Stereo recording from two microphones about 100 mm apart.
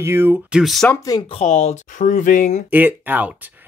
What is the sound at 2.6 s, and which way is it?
Speech, 15° right (ahead or behind).